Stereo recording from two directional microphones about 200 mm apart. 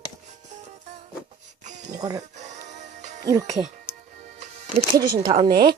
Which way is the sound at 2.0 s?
20° right (ahead or behind).